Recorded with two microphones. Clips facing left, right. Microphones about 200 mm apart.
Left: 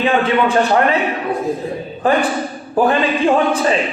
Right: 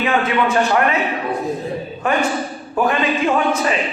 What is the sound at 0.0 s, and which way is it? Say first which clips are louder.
Speech: left 3 dB; 30° left (ahead or behind).